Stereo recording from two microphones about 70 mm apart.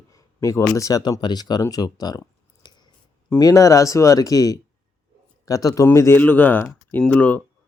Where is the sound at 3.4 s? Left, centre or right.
Left.